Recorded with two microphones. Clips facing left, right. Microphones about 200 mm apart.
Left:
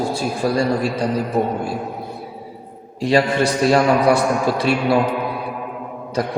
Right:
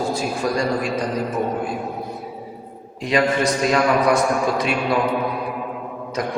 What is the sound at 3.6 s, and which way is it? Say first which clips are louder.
Speech: left 4 dB; 30° left (ahead or behind).